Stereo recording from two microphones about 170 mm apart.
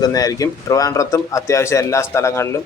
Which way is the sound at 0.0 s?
20° left (ahead or behind).